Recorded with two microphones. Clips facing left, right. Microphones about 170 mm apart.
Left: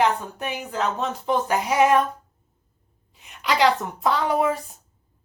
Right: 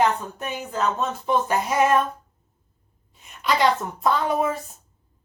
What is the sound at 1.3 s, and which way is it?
Speech, 15° left (ahead or behind).